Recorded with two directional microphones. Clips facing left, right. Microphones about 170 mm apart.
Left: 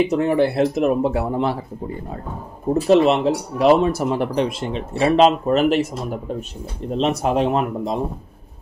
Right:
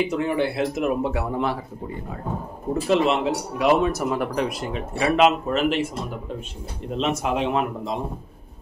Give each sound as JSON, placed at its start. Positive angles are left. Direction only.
{"t": 0.1, "sound": "speech", "side_deg": 40}
{"t": 2.7, "sound": "speech", "side_deg": 40}
{"t": 6.9, "sound": "speech", "side_deg": 35}